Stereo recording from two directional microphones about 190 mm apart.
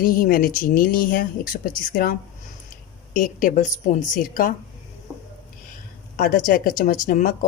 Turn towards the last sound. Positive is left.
turn(degrees=45)  # may be behind; listen again after turning